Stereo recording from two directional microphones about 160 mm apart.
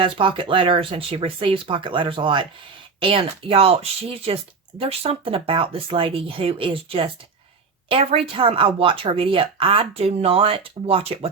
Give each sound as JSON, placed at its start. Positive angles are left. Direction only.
{"t": 0.0, "sound": "speech", "side_deg": -30}